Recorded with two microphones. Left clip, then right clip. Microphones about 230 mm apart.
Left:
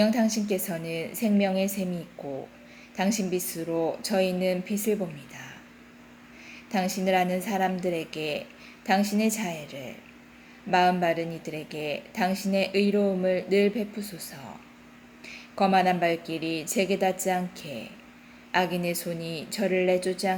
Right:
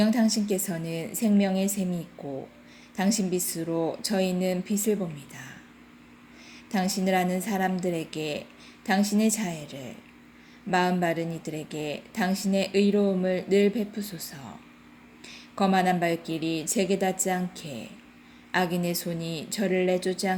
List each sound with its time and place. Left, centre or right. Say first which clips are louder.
0.0 s speech: left 1 dB; right
3.0 s speech: even; right
6.9 s speech: left 1 dB; right